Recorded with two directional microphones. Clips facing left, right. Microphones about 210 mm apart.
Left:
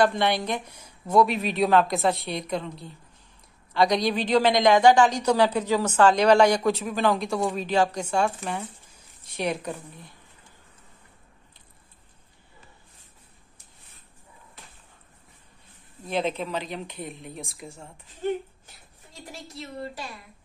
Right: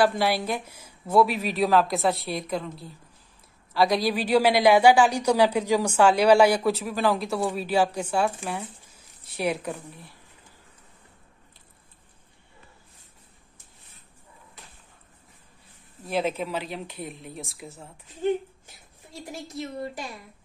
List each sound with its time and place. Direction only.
0.0 s a woman's voice: 5° right (ahead or behind)
16.1 s a woman's voice: 5° right (ahead or behind)
19.8 s a woman's voice: 20° right (ahead or behind)